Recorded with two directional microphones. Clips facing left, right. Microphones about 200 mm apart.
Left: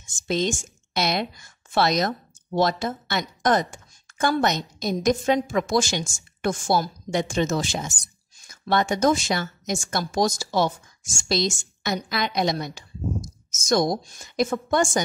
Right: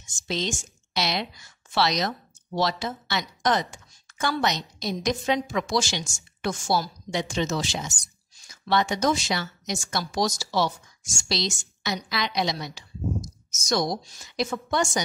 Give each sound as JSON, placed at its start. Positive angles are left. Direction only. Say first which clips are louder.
{"t": 0.0, "sound": "a woman's voice", "louder": "left 5 dB", "side_deg": 50}